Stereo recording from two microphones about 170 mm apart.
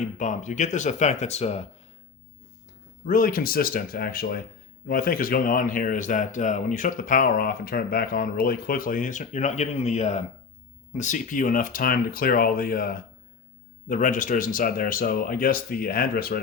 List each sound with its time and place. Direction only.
0.2 s speech: 45° left (ahead or behind)
3.1 s speech: 55° left (ahead or behind)